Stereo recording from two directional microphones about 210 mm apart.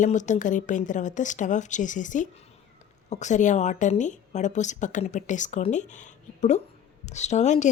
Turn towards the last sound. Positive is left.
turn(degrees=35)  # may be behind; listen again after turning